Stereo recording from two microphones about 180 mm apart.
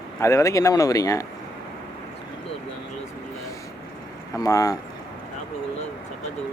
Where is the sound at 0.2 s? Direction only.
15° left (ahead or behind).